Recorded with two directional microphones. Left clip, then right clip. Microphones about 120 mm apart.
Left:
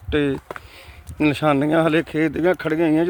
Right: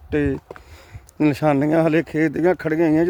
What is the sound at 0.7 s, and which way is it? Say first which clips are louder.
Speech: left 4 dB; 60° right (ahead or behind).